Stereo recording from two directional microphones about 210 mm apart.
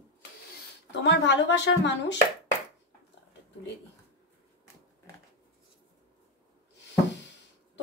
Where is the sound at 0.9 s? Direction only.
55° left (ahead or behind).